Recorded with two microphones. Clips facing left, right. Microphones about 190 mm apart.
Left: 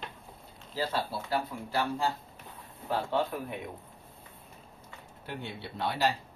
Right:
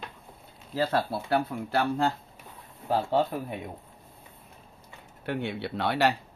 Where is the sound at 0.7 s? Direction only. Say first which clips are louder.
Right 5 dB; 60° right (ahead or behind).